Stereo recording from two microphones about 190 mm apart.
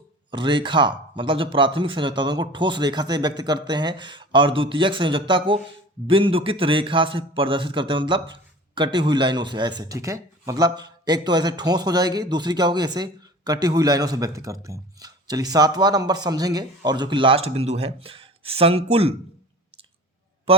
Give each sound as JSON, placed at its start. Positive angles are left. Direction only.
{"t": 0.3, "sound": "a man's voice", "side_deg": -25}